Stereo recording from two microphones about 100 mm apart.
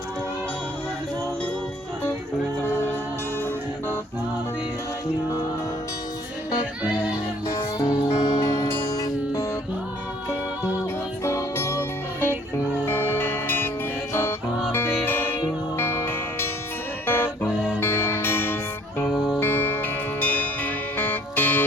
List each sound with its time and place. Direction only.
7.4 s music: 40° left (ahead or behind)
11.2 s music: 30° left (ahead or behind)
19.1 s music: 5° right (ahead or behind)
19.4 s music: 20° left (ahead or behind)